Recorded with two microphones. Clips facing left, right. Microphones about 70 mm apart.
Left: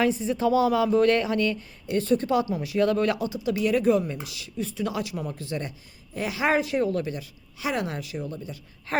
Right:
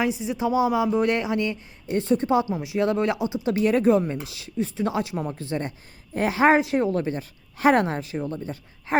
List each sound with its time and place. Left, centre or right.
0.0 s speech: centre; by 7.3 s right
7.6 s a woman's voice: right
7.9 s speech: right
8.9 s gasp: centre